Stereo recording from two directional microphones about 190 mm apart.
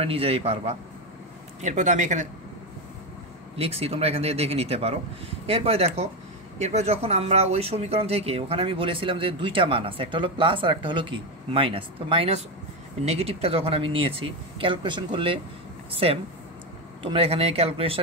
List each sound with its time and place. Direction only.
0.0 s speech: 30° right (ahead or behind)
3.5 s speech: 30° right (ahead or behind)